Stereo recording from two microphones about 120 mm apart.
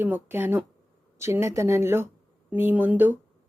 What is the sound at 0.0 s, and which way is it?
Speech, 15° right (ahead or behind).